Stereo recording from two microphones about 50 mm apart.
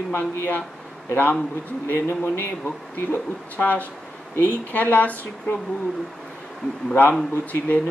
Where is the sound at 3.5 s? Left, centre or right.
Left.